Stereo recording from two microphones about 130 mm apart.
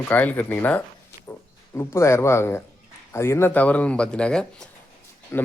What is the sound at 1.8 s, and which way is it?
Speech, 20° left (ahead or behind).